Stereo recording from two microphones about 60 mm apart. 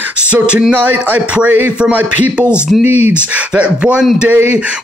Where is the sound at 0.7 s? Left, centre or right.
Right.